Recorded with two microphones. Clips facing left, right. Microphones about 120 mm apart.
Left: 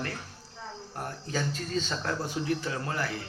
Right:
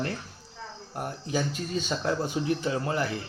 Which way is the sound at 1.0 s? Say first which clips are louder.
Right 4 dB; 15° right (ahead or behind).